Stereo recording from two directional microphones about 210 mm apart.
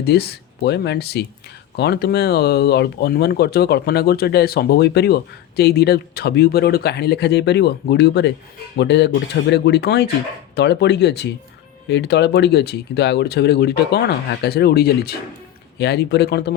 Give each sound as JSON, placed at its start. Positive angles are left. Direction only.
{"t": 0.1, "sound": "speech", "side_deg": 50}